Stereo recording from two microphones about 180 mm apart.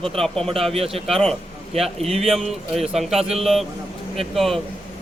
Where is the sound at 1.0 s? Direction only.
Centre (ahead or behind).